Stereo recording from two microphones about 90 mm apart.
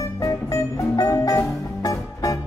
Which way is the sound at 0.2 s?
35° left (ahead or behind).